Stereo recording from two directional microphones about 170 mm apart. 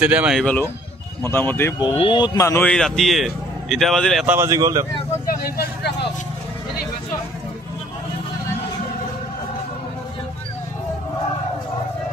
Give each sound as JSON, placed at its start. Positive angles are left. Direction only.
{"t": 0.0, "sound": "speech", "side_deg": -5}
{"t": 1.2, "sound": "speech", "side_deg": 10}
{"t": 1.8, "sound": "speech", "side_deg": 30}
{"t": 2.7, "sound": "a man's voice", "side_deg": 0}
{"t": 4.4, "sound": "speech", "side_deg": -20}
{"t": 5.4, "sound": "speech", "side_deg": 60}